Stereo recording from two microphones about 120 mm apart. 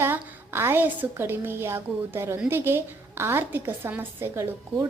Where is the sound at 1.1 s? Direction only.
20° right (ahead or behind).